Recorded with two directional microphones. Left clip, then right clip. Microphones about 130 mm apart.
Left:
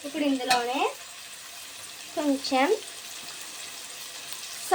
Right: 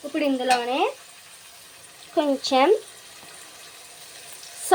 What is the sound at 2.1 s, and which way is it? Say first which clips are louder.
Speech: right 5 dB; 65° right (ahead or behind).